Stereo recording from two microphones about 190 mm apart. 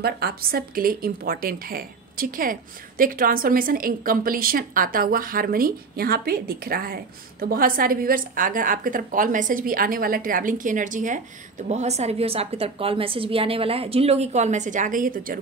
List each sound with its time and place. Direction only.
0.0 s a woman's voice: 55° right (ahead or behind)